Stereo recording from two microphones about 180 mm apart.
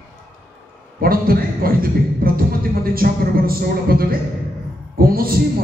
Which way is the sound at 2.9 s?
55° right (ahead or behind).